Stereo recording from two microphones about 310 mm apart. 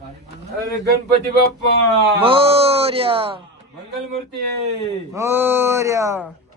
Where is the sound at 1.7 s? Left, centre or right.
Right.